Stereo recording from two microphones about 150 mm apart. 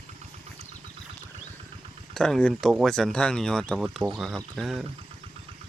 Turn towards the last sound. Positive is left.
turn(degrees=0)  # may be behind; listen again after turning